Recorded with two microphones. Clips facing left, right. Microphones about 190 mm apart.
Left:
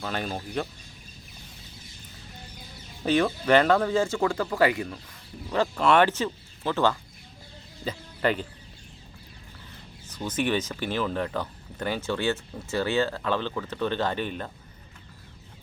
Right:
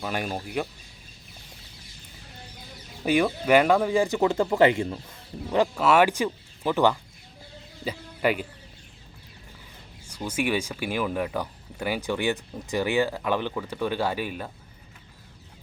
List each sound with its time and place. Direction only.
0.0 s speech: 10° right (ahead or behind)
3.0 s speech: 10° right (ahead or behind); by 4.9 s 25° right (ahead or behind)
5.5 s speech: 15° right (ahead or behind)
10.1 s speech: 10° right (ahead or behind)